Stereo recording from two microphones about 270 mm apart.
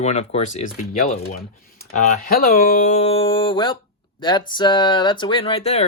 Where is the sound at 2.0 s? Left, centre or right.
Left.